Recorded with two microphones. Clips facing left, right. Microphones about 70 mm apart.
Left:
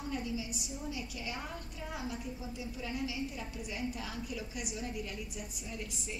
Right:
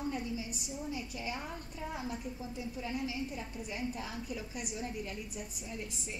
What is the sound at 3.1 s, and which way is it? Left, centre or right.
A woman's voice, right.